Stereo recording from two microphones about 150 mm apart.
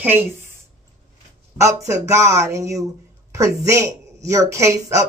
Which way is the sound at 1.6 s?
20° right (ahead or behind).